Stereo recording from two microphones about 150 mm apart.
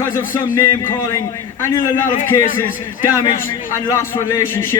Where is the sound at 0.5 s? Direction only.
20° left (ahead or behind).